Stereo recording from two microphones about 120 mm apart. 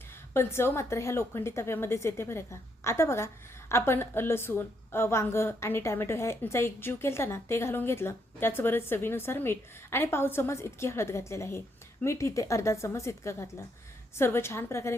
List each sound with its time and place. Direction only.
0.3 s a woman's voice: 20° left (ahead or behind)